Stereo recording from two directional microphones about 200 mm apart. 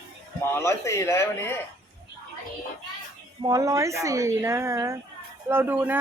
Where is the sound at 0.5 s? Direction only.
15° left (ahead or behind).